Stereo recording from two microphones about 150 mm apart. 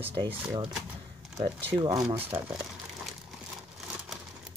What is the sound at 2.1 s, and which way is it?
Speech, 15° right (ahead or behind).